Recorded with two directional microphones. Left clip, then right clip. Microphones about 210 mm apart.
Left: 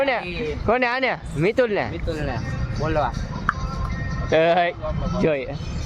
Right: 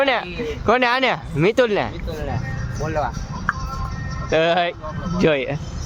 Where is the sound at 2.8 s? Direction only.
15° left (ahead or behind).